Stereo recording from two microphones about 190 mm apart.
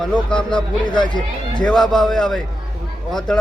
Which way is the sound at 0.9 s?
25° left (ahead or behind).